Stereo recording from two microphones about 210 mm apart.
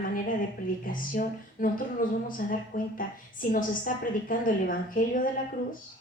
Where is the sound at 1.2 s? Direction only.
45° left (ahead or behind).